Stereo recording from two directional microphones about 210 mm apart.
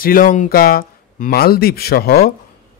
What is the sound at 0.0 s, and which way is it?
A man's voice, 40° left (ahead or behind).